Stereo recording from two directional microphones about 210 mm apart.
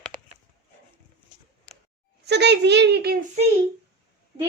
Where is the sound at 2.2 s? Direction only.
55° right (ahead or behind).